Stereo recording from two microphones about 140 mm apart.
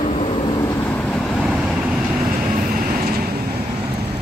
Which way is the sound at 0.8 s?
10° left (ahead or behind).